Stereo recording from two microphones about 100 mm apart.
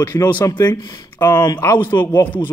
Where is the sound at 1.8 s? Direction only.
20° left (ahead or behind).